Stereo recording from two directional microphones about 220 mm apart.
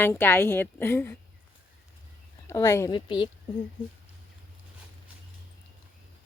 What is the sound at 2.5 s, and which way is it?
Speech, 15° left (ahead or behind).